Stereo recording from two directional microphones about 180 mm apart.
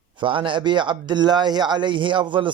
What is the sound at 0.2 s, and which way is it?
Speech, 25° right (ahead or behind).